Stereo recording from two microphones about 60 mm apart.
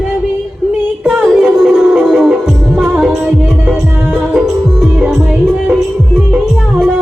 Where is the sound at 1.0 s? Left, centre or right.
Right.